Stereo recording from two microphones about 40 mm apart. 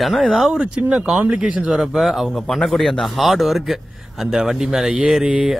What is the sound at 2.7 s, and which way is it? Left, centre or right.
Speech, centre.